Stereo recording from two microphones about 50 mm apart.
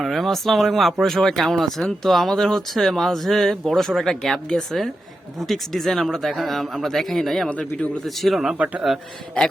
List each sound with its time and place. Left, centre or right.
0.0 s speech: centre
8.5 s a man's voice: right
9.4 s a man's voice: left